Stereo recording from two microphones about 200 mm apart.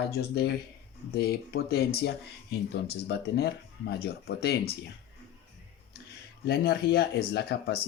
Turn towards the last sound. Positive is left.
turn(degrees=55)  # may be behind; listen again after turning